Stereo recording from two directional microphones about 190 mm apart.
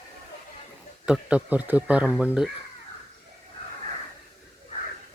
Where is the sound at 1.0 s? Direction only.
5° right (ahead or behind).